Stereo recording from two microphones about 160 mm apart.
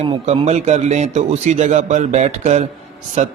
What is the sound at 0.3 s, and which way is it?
A man's voice, 45° right (ahead or behind).